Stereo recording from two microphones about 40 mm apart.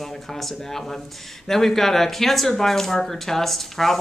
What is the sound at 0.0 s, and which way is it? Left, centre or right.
Speech, centre.